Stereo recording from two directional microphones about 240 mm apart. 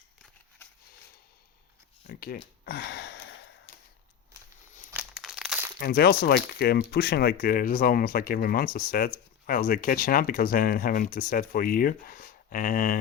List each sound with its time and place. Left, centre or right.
2.0 s speech: left
2.6 s a sound: left
5.1 s crumpling: centre
5.8 s speech: left